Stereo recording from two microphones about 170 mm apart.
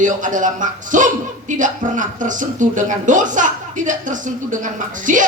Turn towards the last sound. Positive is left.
turn(degrees=-50)  # may be behind; listen again after turning